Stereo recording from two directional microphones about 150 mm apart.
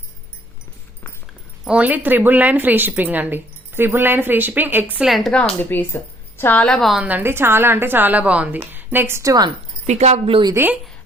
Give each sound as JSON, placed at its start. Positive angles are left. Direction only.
{"t": 1.6, "sound": "a woman's voice", "side_deg": -10}
{"t": 9.8, "sound": "speech", "side_deg": -50}
{"t": 10.5, "sound": "a woman's voice", "side_deg": -15}